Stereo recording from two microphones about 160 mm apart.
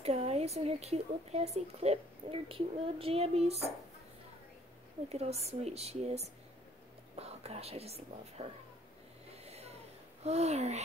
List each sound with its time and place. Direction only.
0.0 s speech: 40° right (ahead or behind)
5.1 s speech: 40° right (ahead or behind)
9.3 s a sound: 40° right (ahead or behind)
10.2 s speech: 45° right (ahead or behind)